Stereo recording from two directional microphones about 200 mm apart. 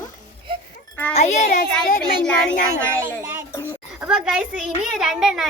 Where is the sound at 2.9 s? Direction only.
10° right (ahead or behind).